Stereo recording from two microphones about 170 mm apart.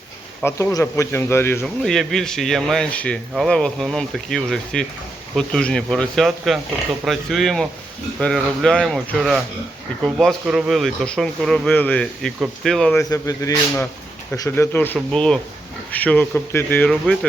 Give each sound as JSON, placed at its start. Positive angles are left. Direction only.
{"t": 0.4, "sound": "speech", "side_deg": 15}
{"t": 1.6, "sound": "speech", "side_deg": 0}
{"t": 13.1, "sound": "a man's voice", "side_deg": 20}